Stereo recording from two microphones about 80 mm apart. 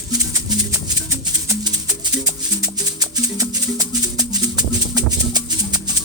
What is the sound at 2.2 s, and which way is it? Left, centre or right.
Music, right.